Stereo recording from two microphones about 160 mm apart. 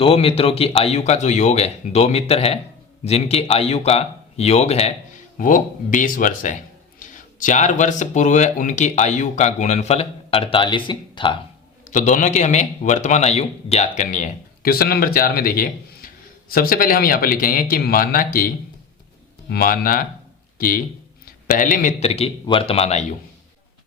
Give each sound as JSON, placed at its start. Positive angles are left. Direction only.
{"t": 0.0, "sound": "speech", "side_deg": 35}
{"t": 5.4, "sound": "a man's voice", "side_deg": 55}
{"t": 11.9, "sound": "a man's voice", "side_deg": 50}
{"t": 22.0, "sound": "speech", "side_deg": 40}